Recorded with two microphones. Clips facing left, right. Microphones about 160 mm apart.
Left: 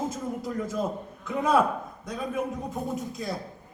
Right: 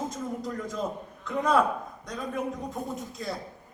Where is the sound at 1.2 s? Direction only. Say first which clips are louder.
Left 1 dB; 5° left (ahead or behind).